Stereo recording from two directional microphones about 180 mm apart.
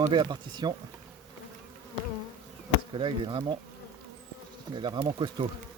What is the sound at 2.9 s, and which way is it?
Speech, 30° right (ahead or behind).